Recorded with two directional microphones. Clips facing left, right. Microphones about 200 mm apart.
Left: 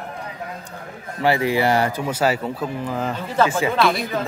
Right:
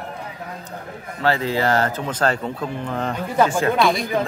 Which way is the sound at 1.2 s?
15° left (ahead or behind).